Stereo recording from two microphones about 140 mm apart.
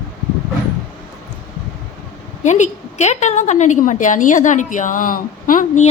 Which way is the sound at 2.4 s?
60° left (ahead or behind).